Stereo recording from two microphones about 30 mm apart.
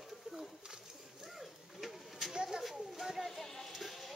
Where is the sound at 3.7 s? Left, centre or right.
Centre.